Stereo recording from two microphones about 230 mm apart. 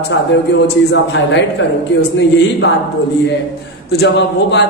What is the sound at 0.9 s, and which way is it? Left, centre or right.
Speech, left.